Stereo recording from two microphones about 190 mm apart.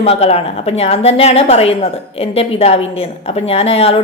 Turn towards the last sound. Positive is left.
turn(degrees=30)  # may be behind; listen again after turning